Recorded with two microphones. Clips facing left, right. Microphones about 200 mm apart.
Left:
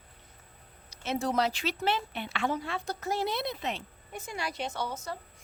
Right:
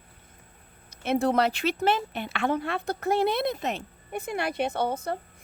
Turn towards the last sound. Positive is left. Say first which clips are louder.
# right 8 dB
turn(degrees=-55)  # may be behind; listen again after turning